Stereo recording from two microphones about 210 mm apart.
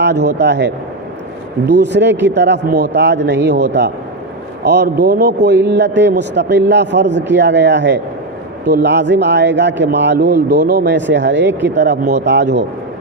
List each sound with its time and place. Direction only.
0.0 s speech: 55° right (ahead or behind)